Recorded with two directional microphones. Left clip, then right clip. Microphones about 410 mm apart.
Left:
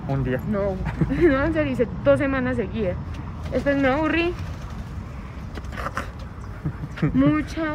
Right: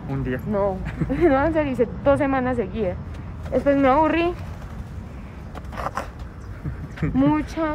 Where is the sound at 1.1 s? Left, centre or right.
Centre.